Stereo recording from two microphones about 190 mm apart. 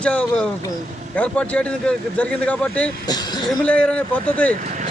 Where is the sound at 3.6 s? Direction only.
5° left (ahead or behind).